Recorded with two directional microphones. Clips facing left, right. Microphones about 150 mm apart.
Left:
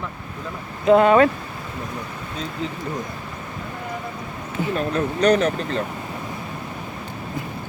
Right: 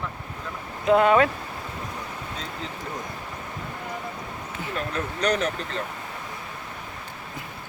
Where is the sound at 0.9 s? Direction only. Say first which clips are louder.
Left 5 dB; 5° right (ahead or behind).